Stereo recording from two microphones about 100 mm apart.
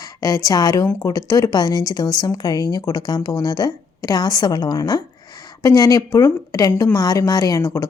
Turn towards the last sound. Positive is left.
turn(degrees=35)  # may be behind; listen again after turning